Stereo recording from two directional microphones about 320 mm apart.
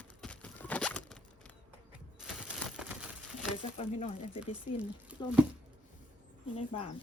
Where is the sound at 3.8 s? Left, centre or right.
Left.